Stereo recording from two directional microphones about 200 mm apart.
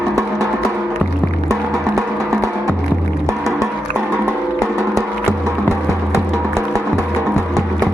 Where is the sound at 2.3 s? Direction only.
15° right (ahead or behind).